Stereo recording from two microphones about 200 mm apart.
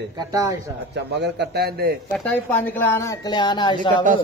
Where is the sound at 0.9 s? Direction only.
55° right (ahead or behind).